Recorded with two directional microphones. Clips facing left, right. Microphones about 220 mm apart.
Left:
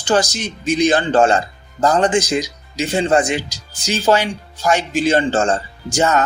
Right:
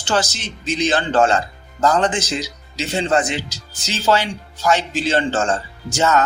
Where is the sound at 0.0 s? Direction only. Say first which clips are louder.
Left 4 dB; 15° left (ahead or behind).